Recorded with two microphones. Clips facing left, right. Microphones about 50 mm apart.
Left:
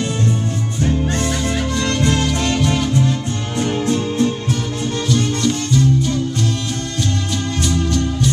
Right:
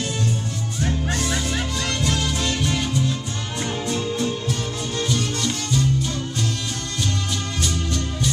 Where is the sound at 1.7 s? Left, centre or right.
Left.